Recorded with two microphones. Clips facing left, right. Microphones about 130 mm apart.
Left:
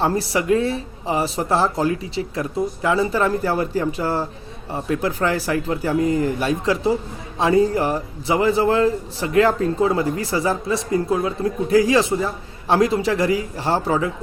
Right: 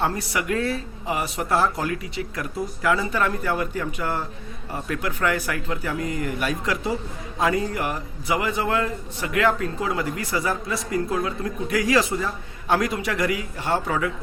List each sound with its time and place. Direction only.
0.0 s a man's voice: 30° left (ahead or behind)